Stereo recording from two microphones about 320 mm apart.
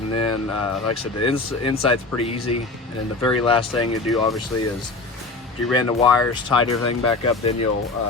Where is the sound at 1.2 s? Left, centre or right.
Centre.